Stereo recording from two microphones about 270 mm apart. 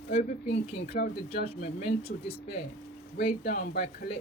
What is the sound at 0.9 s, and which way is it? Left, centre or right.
Speech, left.